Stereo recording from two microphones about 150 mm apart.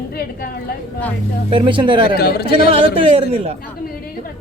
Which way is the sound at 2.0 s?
90° left.